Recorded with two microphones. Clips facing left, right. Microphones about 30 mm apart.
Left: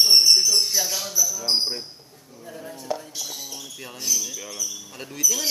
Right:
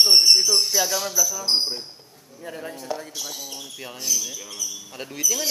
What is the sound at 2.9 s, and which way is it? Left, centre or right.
Speech, centre.